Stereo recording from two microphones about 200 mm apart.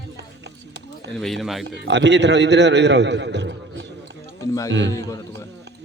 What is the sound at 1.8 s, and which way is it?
A man's voice, 60° right (ahead or behind).